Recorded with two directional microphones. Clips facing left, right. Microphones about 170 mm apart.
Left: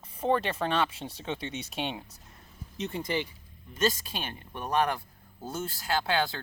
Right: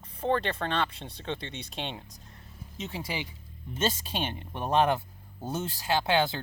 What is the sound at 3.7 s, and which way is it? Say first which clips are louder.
Speech: left 1 dB; 25° right (ahead or behind).